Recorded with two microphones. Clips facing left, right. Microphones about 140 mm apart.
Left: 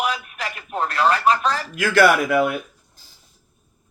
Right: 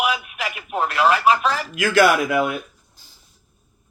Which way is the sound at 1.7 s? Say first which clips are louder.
Even; 50° left (ahead or behind).